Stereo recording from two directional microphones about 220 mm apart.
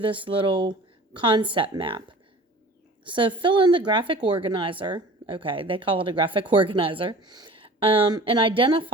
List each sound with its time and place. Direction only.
0.0 s speech: 25° right (ahead or behind)
3.1 s speech: 20° right (ahead or behind)